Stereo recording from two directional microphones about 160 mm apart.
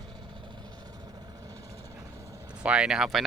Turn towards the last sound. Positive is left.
turn(degrees=-5)  # may be behind; listen again after turning